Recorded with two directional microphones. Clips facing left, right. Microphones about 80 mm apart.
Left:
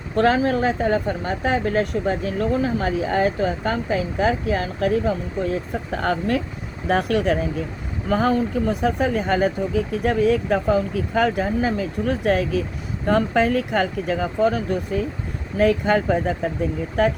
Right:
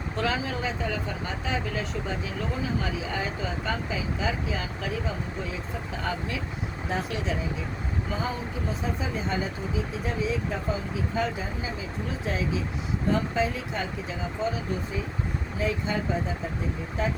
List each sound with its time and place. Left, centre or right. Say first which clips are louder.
0.2 s speech: left 11 dB; left